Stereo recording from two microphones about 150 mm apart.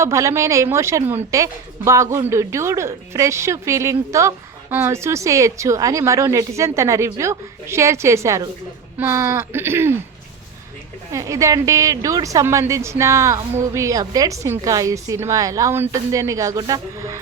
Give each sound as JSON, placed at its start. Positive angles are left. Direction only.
{"t": 0.0, "sound": "a woman's voice", "side_deg": -20}
{"t": 11.1, "sound": "a woman's voice", "side_deg": -20}